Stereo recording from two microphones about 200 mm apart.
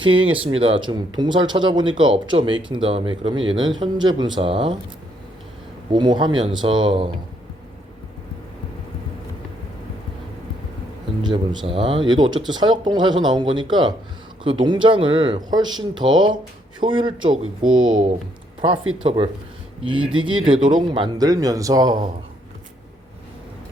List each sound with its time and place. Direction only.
0.0 s speech: 25° right (ahead or behind)
5.9 s speech: 20° right (ahead or behind)
11.2 s speech: 20° right (ahead or behind)
17.3 s speech: 90° right
18.6 s speech: 25° right (ahead or behind)